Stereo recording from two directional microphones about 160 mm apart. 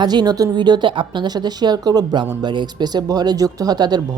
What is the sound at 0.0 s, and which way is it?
A woman's voice, 25° right (ahead or behind).